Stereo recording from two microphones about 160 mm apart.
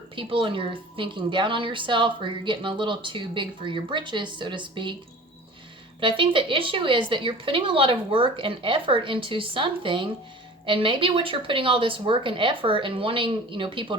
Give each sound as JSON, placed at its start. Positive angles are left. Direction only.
{"t": 0.2, "sound": "a woman's voice", "side_deg": -30}
{"t": 6.0, "sound": "a woman's voice", "side_deg": -30}